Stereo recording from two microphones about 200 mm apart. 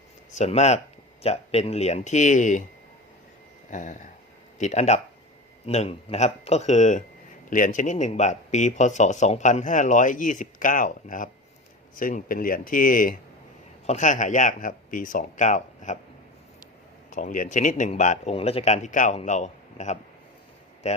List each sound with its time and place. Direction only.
0.3 s speech: 35° left (ahead or behind)
3.7 s a sound: 40° left (ahead or behind)
4.5 s speech: 35° left (ahead or behind)
17.1 s speech: 40° left (ahead or behind)